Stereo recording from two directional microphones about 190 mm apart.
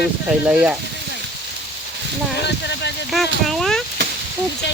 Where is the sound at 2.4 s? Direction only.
65° left (ahead or behind).